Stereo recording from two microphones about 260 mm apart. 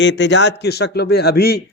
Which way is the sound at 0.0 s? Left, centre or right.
Left.